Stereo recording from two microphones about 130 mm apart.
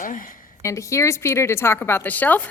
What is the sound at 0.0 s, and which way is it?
Speech, 90° left.